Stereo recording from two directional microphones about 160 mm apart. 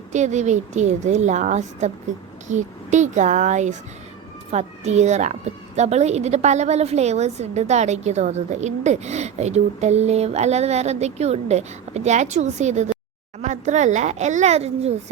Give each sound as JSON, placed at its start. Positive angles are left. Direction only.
{"t": 0.1, "sound": "a woman's voice", "side_deg": -45}